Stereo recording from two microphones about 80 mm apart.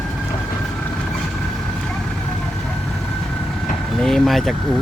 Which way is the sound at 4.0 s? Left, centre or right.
Centre.